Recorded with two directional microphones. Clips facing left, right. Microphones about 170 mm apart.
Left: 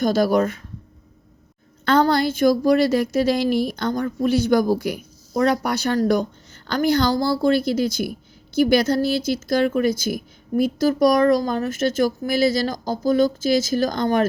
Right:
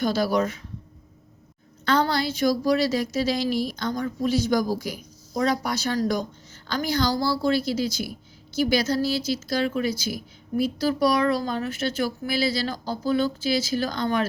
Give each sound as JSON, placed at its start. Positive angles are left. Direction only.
{"t": 0.0, "sound": "a woman's voice", "side_deg": 50}
{"t": 1.8, "sound": "a woman's voice", "side_deg": 50}